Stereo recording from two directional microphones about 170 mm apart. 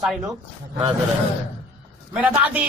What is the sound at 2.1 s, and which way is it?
Speech, 10° right (ahead or behind).